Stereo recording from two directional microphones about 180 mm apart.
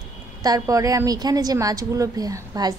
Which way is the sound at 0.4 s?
20° right (ahead or behind).